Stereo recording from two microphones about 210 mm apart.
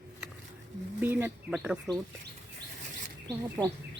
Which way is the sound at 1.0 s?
10° right (ahead or behind).